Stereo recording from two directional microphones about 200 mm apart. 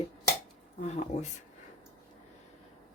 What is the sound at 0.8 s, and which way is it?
Speech, 35° left (ahead or behind).